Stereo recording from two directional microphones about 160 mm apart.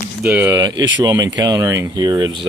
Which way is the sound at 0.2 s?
10° right (ahead or behind).